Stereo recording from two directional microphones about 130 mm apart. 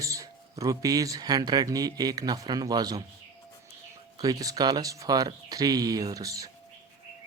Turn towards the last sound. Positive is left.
turn(degrees=-25)  # may be behind; listen again after turning